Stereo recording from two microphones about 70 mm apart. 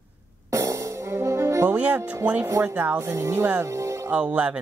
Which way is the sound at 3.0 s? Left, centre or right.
Right.